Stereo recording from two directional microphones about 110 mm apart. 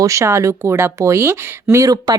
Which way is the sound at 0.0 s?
30° right (ahead or behind).